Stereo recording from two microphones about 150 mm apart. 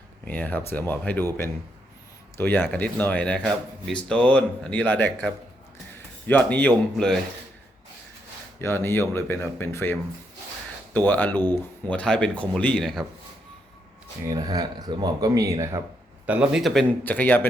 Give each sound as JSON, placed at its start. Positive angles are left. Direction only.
{"t": 0.3, "sound": "speech", "side_deg": 10}
{"t": 8.6, "sound": "speech", "side_deg": 15}
{"t": 14.3, "sound": "speech", "side_deg": -25}
{"t": 16.2, "sound": "a man's voice", "side_deg": -10}
{"t": 17.0, "sound": "speech", "side_deg": 10}